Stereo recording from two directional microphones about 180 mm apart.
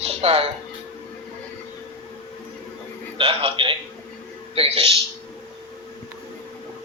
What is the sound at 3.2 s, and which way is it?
A man's voice, 30° right (ahead or behind).